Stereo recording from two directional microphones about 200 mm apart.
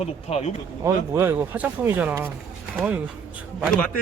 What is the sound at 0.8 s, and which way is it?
A man's voice, 10° right (ahead or behind).